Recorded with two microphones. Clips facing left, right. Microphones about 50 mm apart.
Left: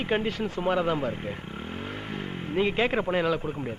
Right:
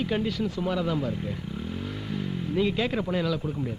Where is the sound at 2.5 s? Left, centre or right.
Left.